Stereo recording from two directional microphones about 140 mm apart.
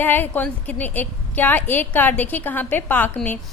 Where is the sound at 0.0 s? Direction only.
15° left (ahead or behind).